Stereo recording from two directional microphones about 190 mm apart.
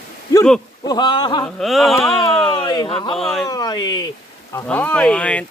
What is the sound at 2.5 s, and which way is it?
Speech, 25° left (ahead or behind).